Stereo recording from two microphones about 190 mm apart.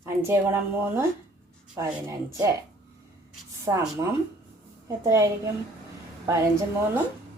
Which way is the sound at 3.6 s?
15° right (ahead or behind).